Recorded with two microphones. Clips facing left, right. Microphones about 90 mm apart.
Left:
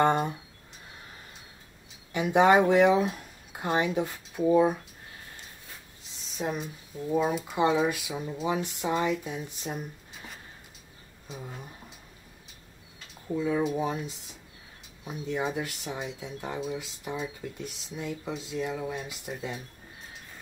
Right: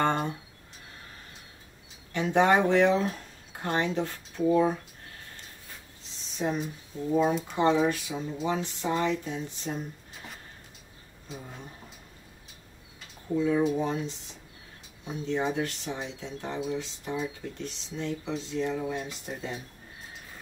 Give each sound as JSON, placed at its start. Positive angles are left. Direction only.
{"t": 0.0, "sound": "speech", "side_deg": 15}
{"t": 2.1, "sound": "speech", "side_deg": 10}
{"t": 6.3, "sound": "speech", "side_deg": 5}
{"t": 11.2, "sound": "speech", "side_deg": 5}
{"t": 13.4, "sound": "speech", "side_deg": 5}